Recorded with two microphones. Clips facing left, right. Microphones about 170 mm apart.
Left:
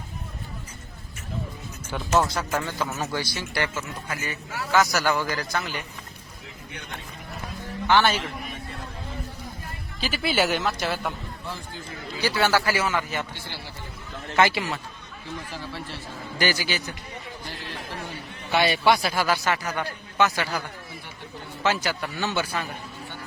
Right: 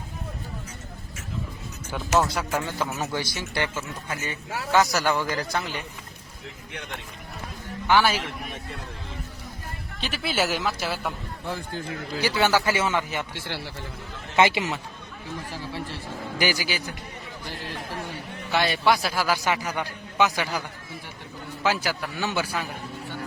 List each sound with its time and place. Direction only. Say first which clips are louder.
2.1 s speech: even; 5° right (ahead or behind); by 5.8 s 30° right (ahead or behind)
7.9 s speech: even; 10° right (ahead or behind)
10.0 s a man's voice: left 2 dB; centre (ahead or behind)
11.4 s speech: right 7 dB; 55° right (ahead or behind)
12.2 s speech: even; 15° right (ahead or behind)
13.3 s a man's voice: right 5 dB; 90° right
14.3 s speech: right 1 dB; 20° right (ahead or behind)
16.4 s speech: left 1 dB; 10° right (ahead or behind)
18.5 s a man's voice: left 1 dB; centre (ahead or behind)
19.7 s a man's voice: even; 15° right (ahead or behind)